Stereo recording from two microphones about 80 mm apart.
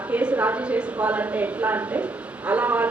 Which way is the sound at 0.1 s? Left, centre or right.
Centre.